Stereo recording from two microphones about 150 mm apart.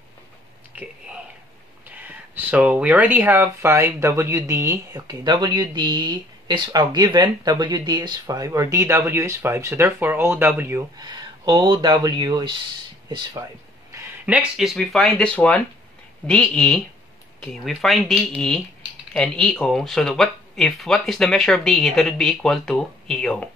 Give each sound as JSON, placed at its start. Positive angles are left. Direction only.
{"t": 0.7, "sound": "speech", "side_deg": -5}
{"t": 5.2, "sound": "speech", "side_deg": -30}
{"t": 13.9, "sound": "speech", "side_deg": -10}